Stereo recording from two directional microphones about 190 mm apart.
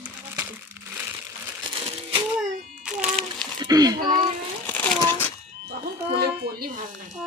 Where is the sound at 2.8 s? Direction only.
5° right (ahead or behind).